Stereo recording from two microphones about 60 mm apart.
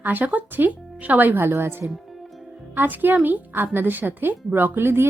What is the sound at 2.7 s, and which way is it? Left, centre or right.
A woman's voice, right.